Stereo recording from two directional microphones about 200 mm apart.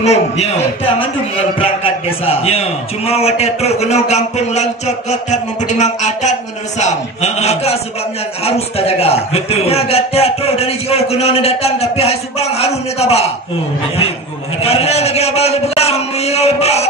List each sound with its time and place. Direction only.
0.0 s a man's voice: 35° left (ahead or behind)
1.6 s a man's voice: 30° left (ahead or behind)
14.6 s a man's voice: 30° left (ahead or behind)